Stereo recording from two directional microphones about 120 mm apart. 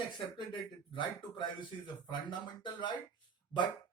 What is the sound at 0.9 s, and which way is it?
Speech, 45° left (ahead or behind).